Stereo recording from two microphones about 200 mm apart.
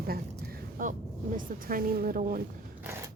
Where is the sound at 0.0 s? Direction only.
50° right (ahead or behind).